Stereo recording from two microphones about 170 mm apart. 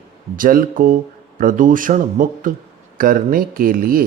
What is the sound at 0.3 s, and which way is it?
Speech, 55° right (ahead or behind).